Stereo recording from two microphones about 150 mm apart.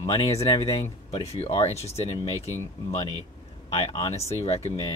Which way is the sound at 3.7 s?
40° left (ahead or behind).